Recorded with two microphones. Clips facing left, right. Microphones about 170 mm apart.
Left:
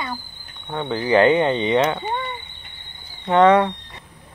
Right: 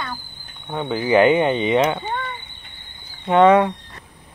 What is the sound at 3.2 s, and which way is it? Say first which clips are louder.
Speech: right 1 dB; 15° right (ahead or behind).